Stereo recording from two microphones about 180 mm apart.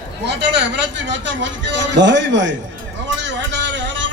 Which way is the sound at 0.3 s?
75° right (ahead or behind).